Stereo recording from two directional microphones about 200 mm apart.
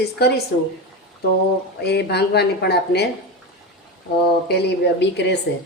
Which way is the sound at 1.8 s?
55° left (ahead or behind).